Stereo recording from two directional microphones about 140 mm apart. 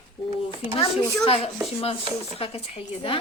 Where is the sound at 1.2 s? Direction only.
45° left (ahead or behind).